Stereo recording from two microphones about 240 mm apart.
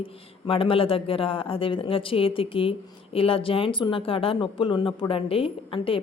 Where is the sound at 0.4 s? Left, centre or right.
Left.